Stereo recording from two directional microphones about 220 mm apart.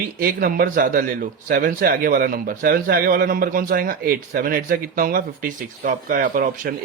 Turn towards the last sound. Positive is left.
turn(degrees=-40)  # may be behind; listen again after turning